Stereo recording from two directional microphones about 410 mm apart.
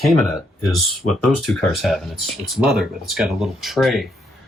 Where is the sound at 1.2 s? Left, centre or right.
Centre.